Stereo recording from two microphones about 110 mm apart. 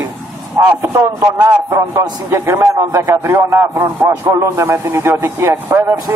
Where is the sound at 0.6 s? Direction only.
20° right (ahead or behind).